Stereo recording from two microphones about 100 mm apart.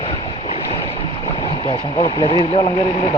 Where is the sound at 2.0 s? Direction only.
55° left (ahead or behind).